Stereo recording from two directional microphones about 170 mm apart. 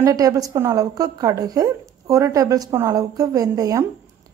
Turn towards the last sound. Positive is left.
turn(degrees=-20)  # may be behind; listen again after turning